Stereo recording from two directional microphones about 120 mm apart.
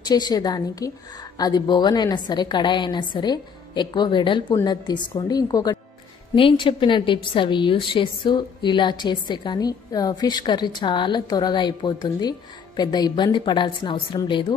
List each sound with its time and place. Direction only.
0.0 s a woman's voice: 35° left (ahead or behind)
6.3 s a woman's voice: 45° left (ahead or behind)